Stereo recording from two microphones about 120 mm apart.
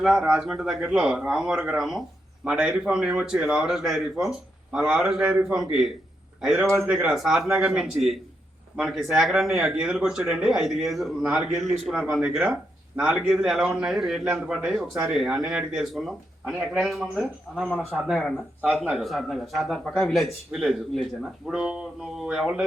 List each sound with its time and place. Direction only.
0.2 s speech: 5° right (ahead or behind)
6.6 s a man's voice: 20° right (ahead or behind)
6.9 s speech: 5° right (ahead or behind)